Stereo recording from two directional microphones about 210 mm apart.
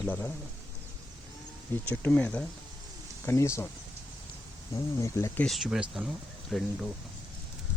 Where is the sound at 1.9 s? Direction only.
10° left (ahead or behind).